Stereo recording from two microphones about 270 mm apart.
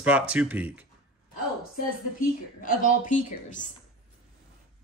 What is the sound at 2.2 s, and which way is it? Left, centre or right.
A woman's voice, left.